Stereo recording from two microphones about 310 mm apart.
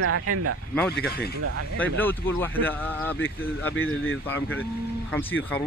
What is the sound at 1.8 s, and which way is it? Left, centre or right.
Speech, centre.